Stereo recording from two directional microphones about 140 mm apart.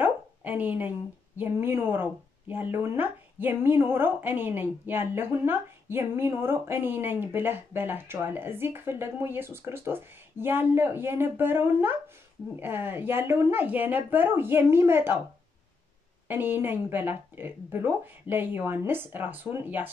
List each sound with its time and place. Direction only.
0.0 s a sound: 10° right (ahead or behind)
1.4 s a woman's voice: 15° right (ahead or behind)
16.3 s a woman's voice: 15° right (ahead or behind)